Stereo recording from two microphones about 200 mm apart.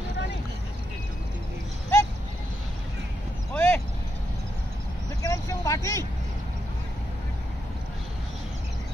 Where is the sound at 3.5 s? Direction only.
10° left (ahead or behind).